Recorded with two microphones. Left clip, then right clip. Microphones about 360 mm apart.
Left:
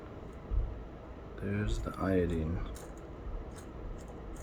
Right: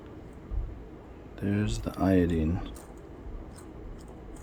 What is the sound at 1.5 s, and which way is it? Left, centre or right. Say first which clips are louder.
Speech: right 6 dB; right.